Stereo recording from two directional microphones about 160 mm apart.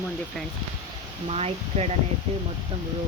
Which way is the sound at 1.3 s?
40° right (ahead or behind).